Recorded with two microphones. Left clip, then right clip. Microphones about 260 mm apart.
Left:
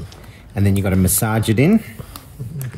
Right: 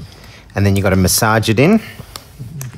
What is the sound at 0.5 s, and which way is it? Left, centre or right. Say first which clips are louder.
Speech: right 5 dB; right.